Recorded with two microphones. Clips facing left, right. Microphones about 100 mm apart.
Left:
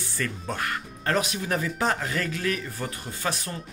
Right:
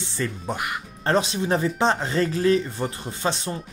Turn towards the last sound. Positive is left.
turn(degrees=-25)  # may be behind; listen again after turning